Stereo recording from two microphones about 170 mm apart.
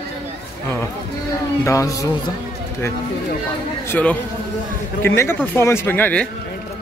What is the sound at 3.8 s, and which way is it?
Speech, 10° left (ahead or behind).